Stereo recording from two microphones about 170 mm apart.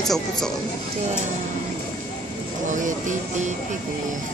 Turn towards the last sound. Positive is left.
turn(degrees=-50)  # may be behind; listen again after turning